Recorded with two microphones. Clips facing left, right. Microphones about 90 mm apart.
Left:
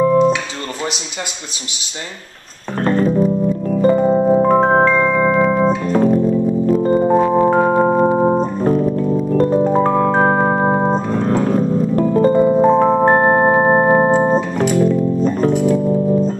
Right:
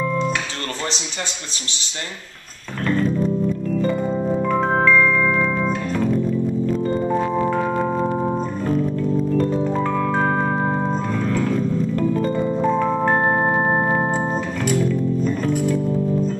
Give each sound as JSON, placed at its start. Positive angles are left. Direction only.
{"t": 0.0, "sound": "music", "side_deg": 35}
{"t": 2.8, "sound": "keyboard", "side_deg": 35}
{"t": 3.6, "sound": "music", "side_deg": 40}
{"t": 8.2, "sound": "organ", "side_deg": 35}
{"t": 11.1, "sound": "music", "side_deg": 35}